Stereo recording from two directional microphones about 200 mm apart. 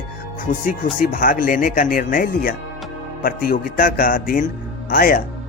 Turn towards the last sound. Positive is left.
turn(degrees=45)  # may be behind; listen again after turning